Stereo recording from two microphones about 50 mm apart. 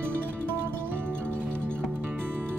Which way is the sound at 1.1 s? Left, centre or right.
Left.